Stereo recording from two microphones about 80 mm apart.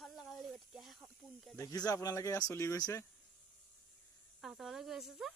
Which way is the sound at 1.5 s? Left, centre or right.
Left.